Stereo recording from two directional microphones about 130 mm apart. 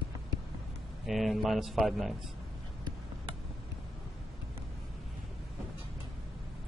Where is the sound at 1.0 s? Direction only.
Centre (ahead or behind).